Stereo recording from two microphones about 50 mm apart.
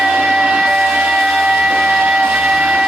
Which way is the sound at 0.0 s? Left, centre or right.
Centre.